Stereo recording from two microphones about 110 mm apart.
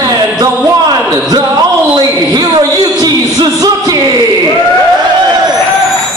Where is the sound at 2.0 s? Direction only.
40° right (ahead or behind).